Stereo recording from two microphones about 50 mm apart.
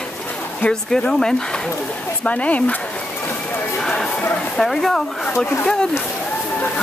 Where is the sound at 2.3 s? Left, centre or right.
Left.